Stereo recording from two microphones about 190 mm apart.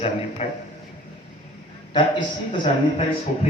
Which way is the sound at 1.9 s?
25° left (ahead or behind).